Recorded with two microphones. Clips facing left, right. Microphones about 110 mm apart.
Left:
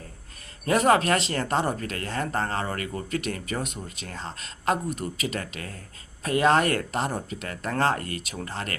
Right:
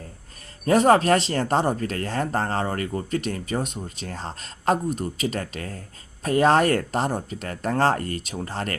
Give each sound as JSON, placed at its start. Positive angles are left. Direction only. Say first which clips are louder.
{"t": 0.6, "sound": "speech", "louder": "right 4 dB", "side_deg": -35}